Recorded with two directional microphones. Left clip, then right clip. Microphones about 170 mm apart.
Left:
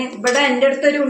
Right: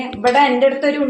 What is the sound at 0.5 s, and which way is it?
Speech, 45° right (ahead or behind).